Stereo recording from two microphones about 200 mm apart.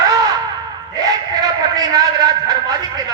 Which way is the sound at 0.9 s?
20° right (ahead or behind).